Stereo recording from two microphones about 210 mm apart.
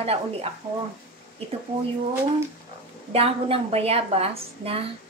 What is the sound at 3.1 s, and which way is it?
A woman's voice, 25° right (ahead or behind).